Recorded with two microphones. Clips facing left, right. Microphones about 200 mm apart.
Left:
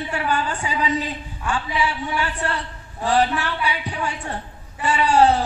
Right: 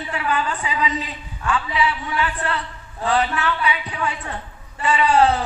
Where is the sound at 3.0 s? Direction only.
30° left (ahead or behind).